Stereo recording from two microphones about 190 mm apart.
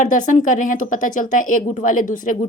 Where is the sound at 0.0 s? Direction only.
40° left (ahead or behind).